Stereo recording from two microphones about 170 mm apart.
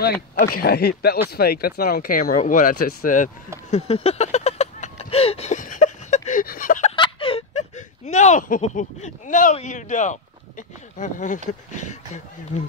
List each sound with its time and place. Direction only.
0.0 s speech: 65° left (ahead or behind)
3.7 s vehicle: 35° left (ahead or behind)
7.0 s whimper: 30° left (ahead or behind); by 10.1 s 45° left (ahead or behind)
11.0 s speech: 50° left (ahead or behind)